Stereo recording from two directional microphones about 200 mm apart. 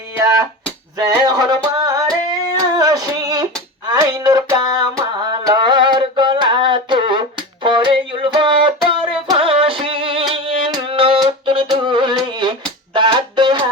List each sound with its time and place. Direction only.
0.9 s music: 20° right (ahead or behind)
2.6 s female singing: 20° right (ahead or behind)
3.8 s a sound: 20° right (ahead or behind)